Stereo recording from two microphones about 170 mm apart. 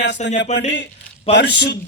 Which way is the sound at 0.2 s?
40° left (ahead or behind).